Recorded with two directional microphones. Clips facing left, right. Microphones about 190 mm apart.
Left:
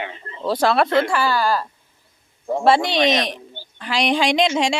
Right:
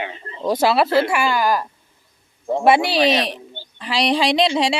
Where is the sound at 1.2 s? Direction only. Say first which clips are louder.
Right 1 dB; 15° right (ahead or behind).